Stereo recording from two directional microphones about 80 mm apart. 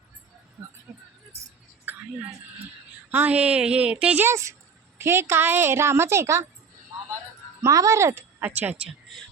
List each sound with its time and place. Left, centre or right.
1.9 s a sound: right
3.1 s a woman's voice: right
4.3 s a woman's voice: right
7.6 s speech: right
8.4 s speech: right